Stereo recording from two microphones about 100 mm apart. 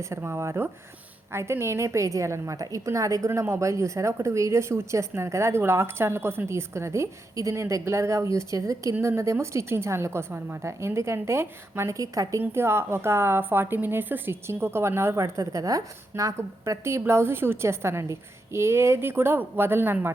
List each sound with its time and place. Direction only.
0.0 s a woman's voice: 30° right (ahead or behind)